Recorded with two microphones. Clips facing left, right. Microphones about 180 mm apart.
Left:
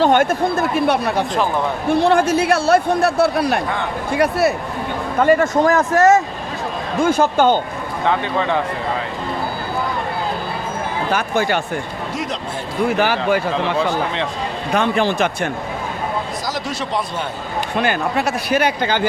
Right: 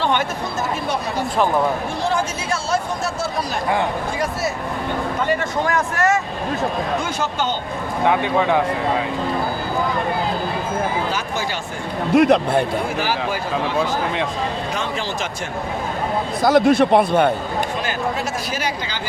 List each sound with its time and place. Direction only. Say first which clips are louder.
0.0 s speech: left 7 dB; 50° left (ahead or behind)
5.2 s a man's voice: left 10 dB; 45° left (ahead or behind)
7.0 s speech: left 9 dB; 50° left (ahead or behind)
8.0 s speech: right 2 dB; 10° right (ahead or behind)
11.1 s speech: left 6 dB; 60° left (ahead or behind)
12.1 s a man's voice: right 14 dB; 60° right (ahead or behind)
13.0 s speech: left 5 dB; 65° left (ahead or behind)
16.4 s a man's voice: right 11 dB; 55° right (ahead or behind)
17.7 s speech: left 4 dB; 65° left (ahead or behind)